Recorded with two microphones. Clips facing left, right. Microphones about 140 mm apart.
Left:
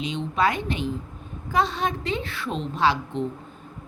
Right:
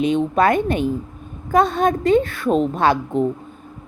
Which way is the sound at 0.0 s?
50° right (ahead or behind).